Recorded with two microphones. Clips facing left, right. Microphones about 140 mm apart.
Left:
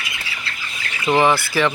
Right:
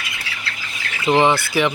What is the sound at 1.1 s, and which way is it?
Speech, 20° right (ahead or behind).